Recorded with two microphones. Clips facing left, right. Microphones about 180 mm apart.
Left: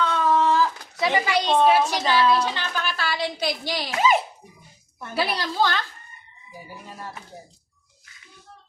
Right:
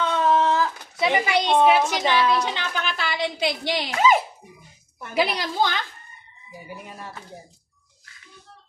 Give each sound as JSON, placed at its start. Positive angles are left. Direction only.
{"t": 0.0, "sound": "speech", "side_deg": -20}
{"t": 5.1, "sound": "a woman's voice", "side_deg": -15}